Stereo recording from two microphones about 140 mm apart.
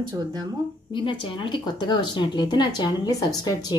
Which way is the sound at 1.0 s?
35° left (ahead or behind).